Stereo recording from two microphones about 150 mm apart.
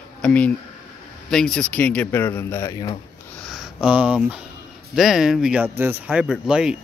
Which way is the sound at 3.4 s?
Centre (ahead or behind).